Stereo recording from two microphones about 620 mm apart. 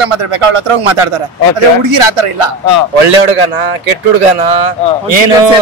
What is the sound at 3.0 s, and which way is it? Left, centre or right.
A man's voice, right.